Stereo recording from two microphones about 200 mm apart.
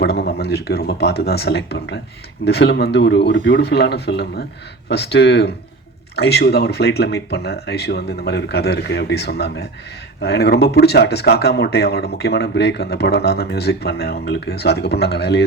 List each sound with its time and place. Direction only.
0.0 s speech: 55° left (ahead or behind)